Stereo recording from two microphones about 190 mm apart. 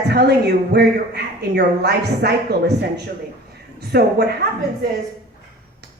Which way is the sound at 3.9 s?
55° right (ahead or behind).